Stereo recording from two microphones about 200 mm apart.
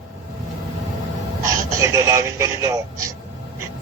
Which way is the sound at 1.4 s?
15° right (ahead or behind).